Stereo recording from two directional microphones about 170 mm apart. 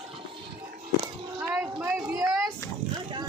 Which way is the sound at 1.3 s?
15° right (ahead or behind).